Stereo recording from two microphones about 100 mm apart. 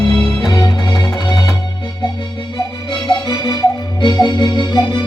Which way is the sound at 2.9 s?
45° left (ahead or behind).